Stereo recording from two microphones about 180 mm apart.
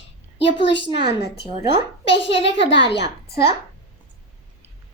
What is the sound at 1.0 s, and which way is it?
Speech, 65° left (ahead or behind).